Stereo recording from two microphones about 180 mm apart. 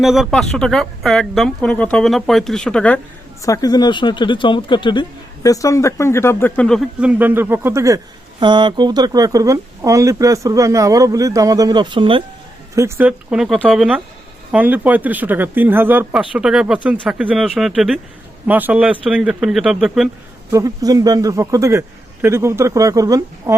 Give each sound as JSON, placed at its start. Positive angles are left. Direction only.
{"t": 0.0, "sound": "speech", "side_deg": 0}
{"t": 3.4, "sound": "speech", "side_deg": 20}
{"t": 12.7, "sound": "speech", "side_deg": -15}
{"t": 20.5, "sound": "speech", "side_deg": -20}